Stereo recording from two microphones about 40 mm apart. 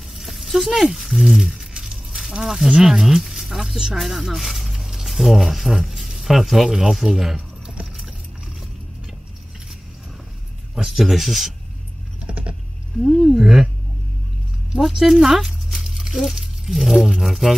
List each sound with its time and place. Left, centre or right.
0.1 s a sound: centre
2.4 s speech: centre
7.3 s keys jangling: right
10.9 s speech: centre
12.3 s a sound: right
13.0 s speech: centre
14.9 s speech: centre
15.8 s a sound: centre
17.2 s speech: centre